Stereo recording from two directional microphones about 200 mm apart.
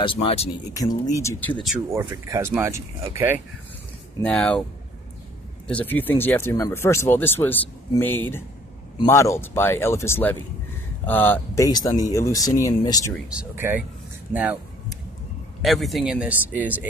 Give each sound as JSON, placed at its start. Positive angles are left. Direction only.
{"t": 0.0, "sound": "speech", "side_deg": 25}
{"t": 1.1, "sound": "speech", "side_deg": 15}
{"t": 2.0, "sound": "speech", "side_deg": -15}
{"t": 4.2, "sound": "speech", "side_deg": 5}
{"t": 5.7, "sound": "speech", "side_deg": 10}
{"t": 13.3, "sound": "speech", "side_deg": -10}
{"t": 14.3, "sound": "a sound", "side_deg": -5}
{"t": 15.6, "sound": "speech", "side_deg": 0}